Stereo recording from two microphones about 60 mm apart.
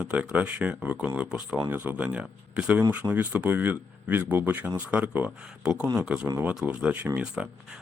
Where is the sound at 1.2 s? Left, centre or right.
Centre.